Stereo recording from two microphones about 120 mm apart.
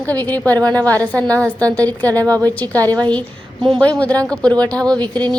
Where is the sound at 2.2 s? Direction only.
30° right (ahead or behind).